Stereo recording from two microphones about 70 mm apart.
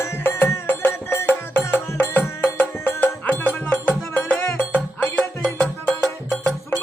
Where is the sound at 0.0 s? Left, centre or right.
Left.